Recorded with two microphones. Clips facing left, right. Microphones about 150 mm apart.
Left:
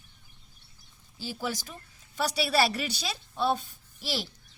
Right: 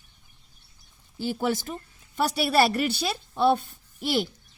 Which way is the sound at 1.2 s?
55° right (ahead or behind).